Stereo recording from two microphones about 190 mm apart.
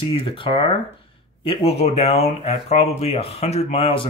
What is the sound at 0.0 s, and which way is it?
Speech, 30° left (ahead or behind).